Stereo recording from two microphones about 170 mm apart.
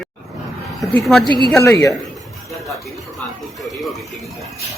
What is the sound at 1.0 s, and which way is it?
Speech, centre (ahead or behind).